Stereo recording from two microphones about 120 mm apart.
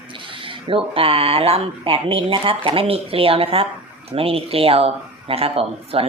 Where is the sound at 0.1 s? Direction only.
45° right (ahead or behind).